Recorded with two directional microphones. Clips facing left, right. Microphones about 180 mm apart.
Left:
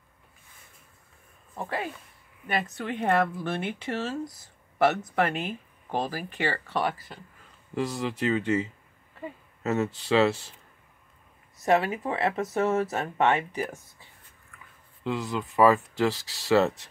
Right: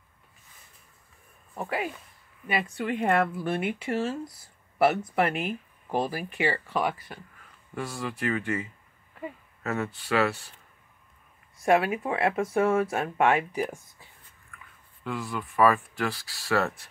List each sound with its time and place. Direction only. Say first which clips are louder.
1.5 s speech: right 1 dB; 5° right (ahead or behind)
7.7 s speech: left 4 dB; 20° left (ahead or behind)
11.6 s speech: right 1 dB; 10° right (ahead or behind)
15.0 s speech: left 3 dB; 20° left (ahead or behind)